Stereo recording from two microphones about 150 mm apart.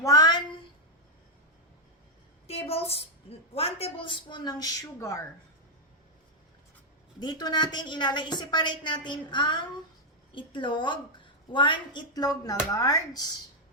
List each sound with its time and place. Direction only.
0.0 s a sound: 25° left (ahead or behind)
2.5 s a woman's voice: 40° left (ahead or behind); by 5.2 s 20° left (ahead or behind)
7.2 s a woman's voice: 30° left (ahead or behind)